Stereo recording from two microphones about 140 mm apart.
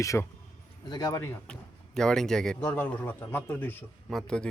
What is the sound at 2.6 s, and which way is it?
A man's voice, 15° left (ahead or behind).